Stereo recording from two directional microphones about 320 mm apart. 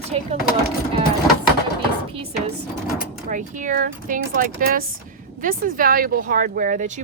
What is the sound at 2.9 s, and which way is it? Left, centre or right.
Speech, right.